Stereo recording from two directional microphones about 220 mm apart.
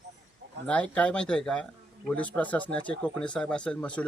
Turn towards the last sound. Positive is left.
turn(degrees=5)  # may be behind; listen again after turning